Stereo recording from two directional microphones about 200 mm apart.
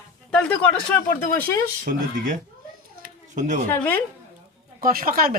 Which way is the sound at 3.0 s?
40° right (ahead or behind).